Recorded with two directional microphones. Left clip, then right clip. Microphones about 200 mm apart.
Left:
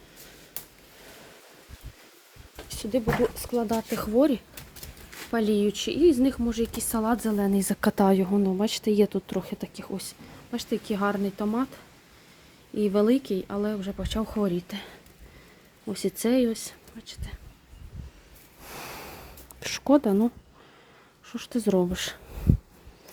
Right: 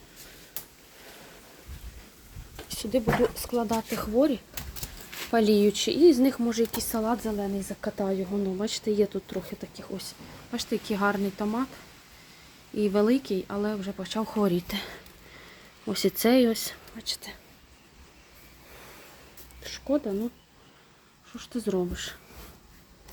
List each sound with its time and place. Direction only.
2.6 s speech: 10° left (ahead or behind)
3.9 s speech: 30° left (ahead or behind)
5.3 s speech: centre (ahead or behind); by 7.3 s 25° left (ahead or behind)
7.3 s speech: 40° left (ahead or behind)
8.5 s speech: 20° left (ahead or behind)
12.7 s speech: 15° left (ahead or behind)
14.4 s speech: centre (ahead or behind)
19.6 s speech: 35° left (ahead or behind)
21.2 s speech: 25° left (ahead or behind)